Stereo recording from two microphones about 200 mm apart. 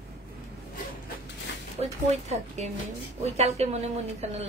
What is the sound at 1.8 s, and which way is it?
Speech, 30° right (ahead or behind).